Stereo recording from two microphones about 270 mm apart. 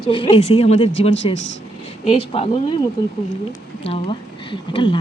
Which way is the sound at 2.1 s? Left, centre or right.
Left.